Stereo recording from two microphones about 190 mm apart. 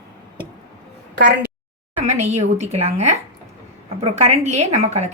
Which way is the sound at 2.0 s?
35° right (ahead or behind).